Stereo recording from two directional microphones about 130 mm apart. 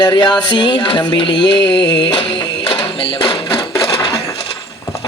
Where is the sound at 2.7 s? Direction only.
45° left (ahead or behind).